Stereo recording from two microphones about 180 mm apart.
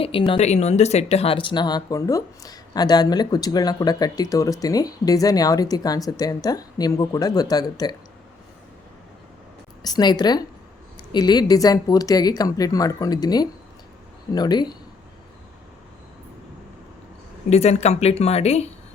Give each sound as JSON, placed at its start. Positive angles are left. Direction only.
{"t": 0.0, "sound": "speech", "side_deg": 30}
{"t": 9.8, "sound": "speech", "side_deg": 20}
{"t": 17.5, "sound": "speech", "side_deg": 35}